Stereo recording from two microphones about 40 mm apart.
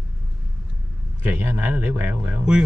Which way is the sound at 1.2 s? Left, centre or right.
Right.